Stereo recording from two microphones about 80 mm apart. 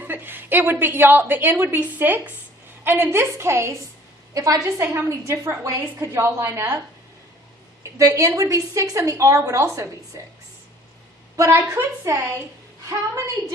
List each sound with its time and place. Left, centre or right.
0.0 s a woman's voice: right
4.4 s a woman's voice: right
7.9 s a woman's voice: right
11.4 s a woman's voice: right